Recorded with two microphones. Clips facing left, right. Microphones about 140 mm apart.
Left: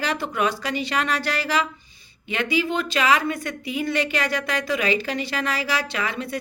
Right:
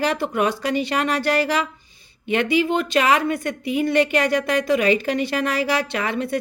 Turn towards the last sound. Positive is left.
turn(degrees=-55)  # may be behind; listen again after turning